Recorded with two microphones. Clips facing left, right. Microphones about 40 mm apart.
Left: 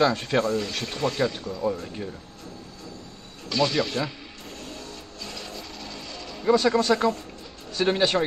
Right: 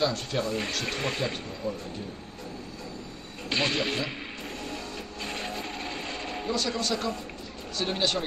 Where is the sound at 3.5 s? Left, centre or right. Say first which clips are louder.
Left 3 dB; right.